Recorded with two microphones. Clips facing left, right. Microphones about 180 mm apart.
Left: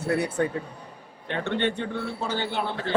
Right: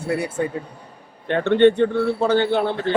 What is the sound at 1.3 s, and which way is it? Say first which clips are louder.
A man's voice: right 12 dB; 60° right (ahead or behind).